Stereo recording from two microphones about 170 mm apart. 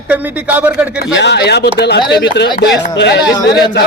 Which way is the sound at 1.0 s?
85° left.